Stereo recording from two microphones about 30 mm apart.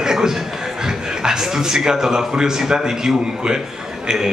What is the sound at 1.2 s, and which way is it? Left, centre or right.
A man's voice, centre.